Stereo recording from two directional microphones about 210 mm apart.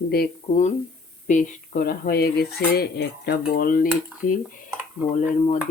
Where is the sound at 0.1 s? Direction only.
45° left (ahead or behind).